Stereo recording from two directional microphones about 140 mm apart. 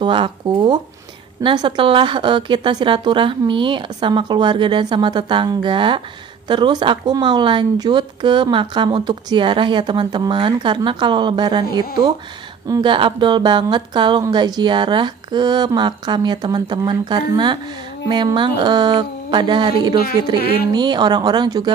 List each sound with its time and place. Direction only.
0.0 s a woman's voice: 35° right (ahead or behind)
20.3 s speech: 90° left
20.7 s a woman's voice: 30° right (ahead or behind)